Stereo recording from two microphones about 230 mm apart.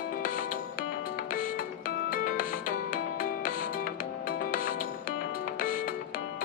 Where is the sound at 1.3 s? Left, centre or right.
Left.